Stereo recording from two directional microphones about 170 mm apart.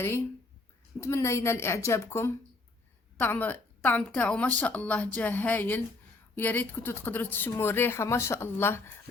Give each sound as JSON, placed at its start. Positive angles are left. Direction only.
{"t": 0.9, "sound": "speech", "side_deg": 15}